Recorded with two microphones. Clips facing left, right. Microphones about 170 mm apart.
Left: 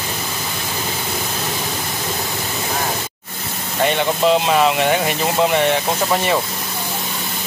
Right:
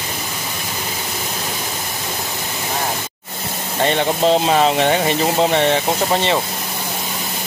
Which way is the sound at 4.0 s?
35° right (ahead or behind).